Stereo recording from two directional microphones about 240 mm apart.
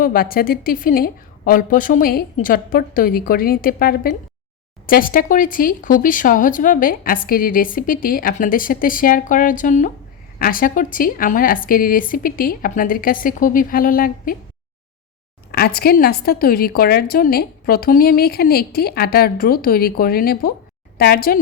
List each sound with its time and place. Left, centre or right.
0.0 s speech: left
15.5 s speech: left